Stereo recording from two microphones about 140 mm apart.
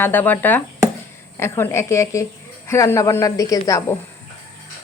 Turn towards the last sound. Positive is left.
turn(degrees=25)  # may be behind; listen again after turning